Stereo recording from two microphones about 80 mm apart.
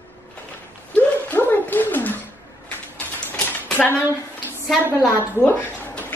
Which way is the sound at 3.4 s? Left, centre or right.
Centre.